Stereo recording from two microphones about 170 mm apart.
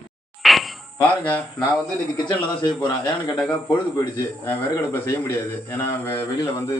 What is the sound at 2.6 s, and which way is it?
Speech, 25° left (ahead or behind).